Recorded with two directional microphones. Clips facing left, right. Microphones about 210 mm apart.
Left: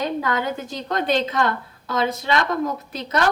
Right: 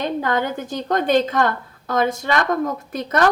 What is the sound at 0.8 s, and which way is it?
A woman's voice, 45° right (ahead or behind).